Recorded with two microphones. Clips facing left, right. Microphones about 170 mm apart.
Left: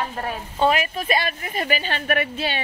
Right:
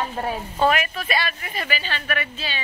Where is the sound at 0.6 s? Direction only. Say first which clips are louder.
Left 1 dB; 30° left (ahead or behind).